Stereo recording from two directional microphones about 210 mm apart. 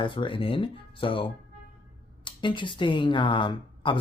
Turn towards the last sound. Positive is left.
turn(degrees=25)  # may be behind; listen again after turning